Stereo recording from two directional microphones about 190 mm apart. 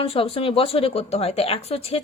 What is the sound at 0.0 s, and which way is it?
Speech, 30° left (ahead or behind).